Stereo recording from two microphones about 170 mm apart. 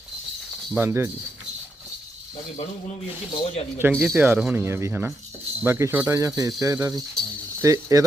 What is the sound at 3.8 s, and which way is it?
A man's voice, 10° right (ahead or behind).